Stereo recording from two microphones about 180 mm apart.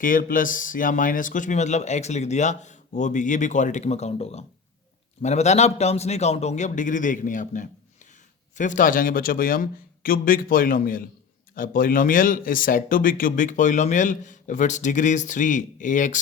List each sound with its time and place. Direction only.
0.0 s a man's voice: 50° left (ahead or behind)